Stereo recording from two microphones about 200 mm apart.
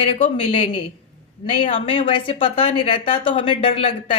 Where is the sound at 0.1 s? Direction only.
25° left (ahead or behind).